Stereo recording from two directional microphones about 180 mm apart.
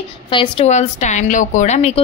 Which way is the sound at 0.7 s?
40° left (ahead or behind).